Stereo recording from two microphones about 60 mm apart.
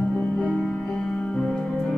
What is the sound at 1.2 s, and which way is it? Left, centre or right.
Music, centre.